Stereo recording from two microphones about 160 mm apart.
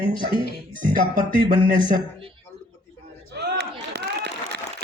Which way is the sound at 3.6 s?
90° right.